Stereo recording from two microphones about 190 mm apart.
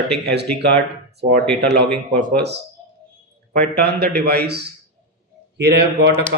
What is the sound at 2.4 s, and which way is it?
Speech, 60° right (ahead or behind).